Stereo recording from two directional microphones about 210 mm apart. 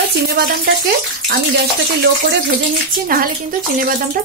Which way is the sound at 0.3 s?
50° right (ahead or behind).